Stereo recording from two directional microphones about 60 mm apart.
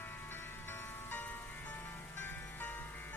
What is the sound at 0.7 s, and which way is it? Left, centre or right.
Music, left.